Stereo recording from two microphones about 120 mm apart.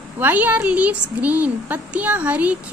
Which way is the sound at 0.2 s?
15° right (ahead or behind).